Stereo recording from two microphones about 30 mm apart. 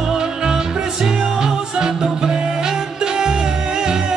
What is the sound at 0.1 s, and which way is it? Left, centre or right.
Music, right.